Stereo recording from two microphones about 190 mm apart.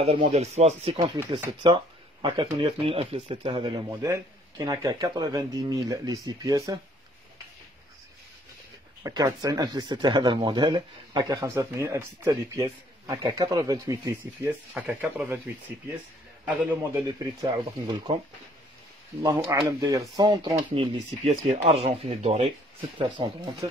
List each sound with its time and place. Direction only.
0.0 s speech: 30° right (ahead or behind)
9.0 s a man's voice: 20° right (ahead or behind)
16.4 s a man's voice: 15° right (ahead or behind)
17.5 s speech: 25° right (ahead or behind)
19.5 s a man's voice: 15° right (ahead or behind)
20.2 s speech: 30° right (ahead or behind)